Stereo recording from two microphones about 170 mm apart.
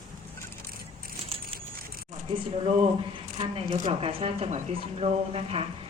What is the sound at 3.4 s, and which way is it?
Speech, 35° right (ahead or behind).